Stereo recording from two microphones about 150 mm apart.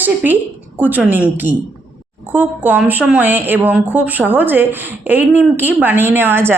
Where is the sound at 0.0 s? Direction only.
10° right (ahead or behind).